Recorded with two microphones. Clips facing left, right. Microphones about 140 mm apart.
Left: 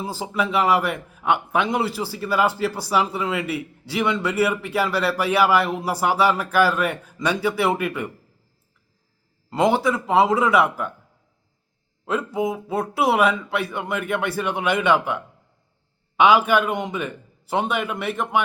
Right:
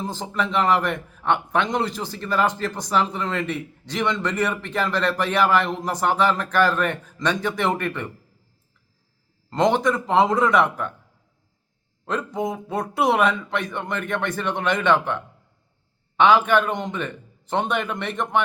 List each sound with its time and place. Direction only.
0.0 s a man's voice: 10° left (ahead or behind)
9.5 s a man's voice: 5° left (ahead or behind)
12.0 s a man's voice: 5° left (ahead or behind)